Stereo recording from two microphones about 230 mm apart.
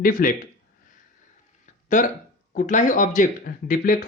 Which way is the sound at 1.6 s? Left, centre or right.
Left.